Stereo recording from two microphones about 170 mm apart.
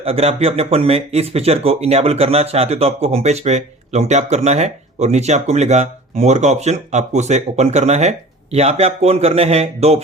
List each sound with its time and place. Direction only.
0.0 s speech: 35° right (ahead or behind)